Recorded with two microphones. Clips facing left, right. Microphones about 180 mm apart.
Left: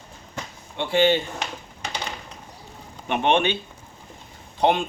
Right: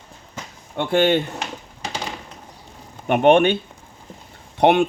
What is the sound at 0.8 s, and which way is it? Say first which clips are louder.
Speech: right 2 dB; 55° right (ahead or behind).